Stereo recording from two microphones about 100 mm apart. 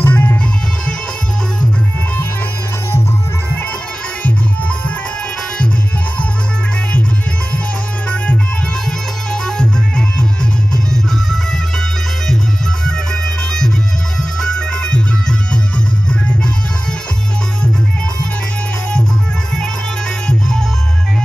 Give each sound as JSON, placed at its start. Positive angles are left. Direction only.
{"t": 0.0, "sound": "music", "side_deg": 20}
{"t": 4.2, "sound": "music", "side_deg": 15}
{"t": 9.3, "sound": "music", "side_deg": 5}
{"t": 12.8, "sound": "music", "side_deg": 5}